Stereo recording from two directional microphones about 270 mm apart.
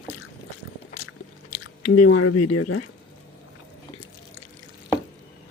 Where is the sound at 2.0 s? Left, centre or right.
Left.